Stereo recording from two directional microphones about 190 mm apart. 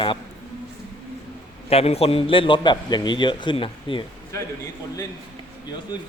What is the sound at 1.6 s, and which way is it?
A man's voice, 30° left (ahead or behind).